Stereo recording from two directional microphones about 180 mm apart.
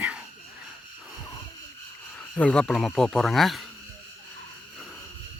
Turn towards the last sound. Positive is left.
turn(degrees=0)  # may be behind; listen again after turning